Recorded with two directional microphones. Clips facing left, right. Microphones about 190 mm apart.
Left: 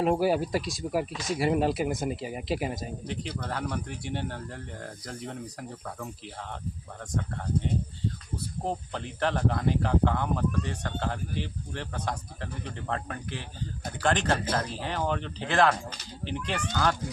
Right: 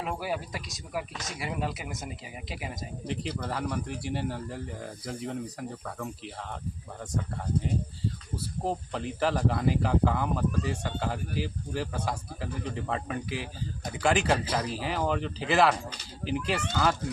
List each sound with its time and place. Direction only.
0.0 s speech: 35° left (ahead or behind)
3.1 s speech: centre (ahead or behind)
8.6 s a man's voice: centre (ahead or behind)